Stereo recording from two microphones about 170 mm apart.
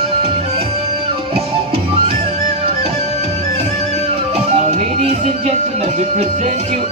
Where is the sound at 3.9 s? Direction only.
40° right (ahead or behind).